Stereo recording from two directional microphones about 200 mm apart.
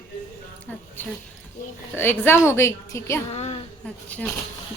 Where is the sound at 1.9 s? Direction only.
10° left (ahead or behind).